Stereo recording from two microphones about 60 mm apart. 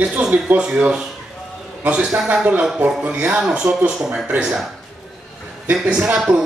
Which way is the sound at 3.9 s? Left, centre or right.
Centre.